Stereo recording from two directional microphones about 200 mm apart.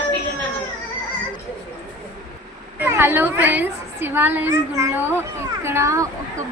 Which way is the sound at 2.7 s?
10° right (ahead or behind).